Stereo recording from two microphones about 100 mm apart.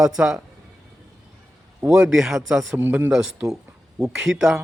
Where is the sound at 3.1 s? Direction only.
5° right (ahead or behind).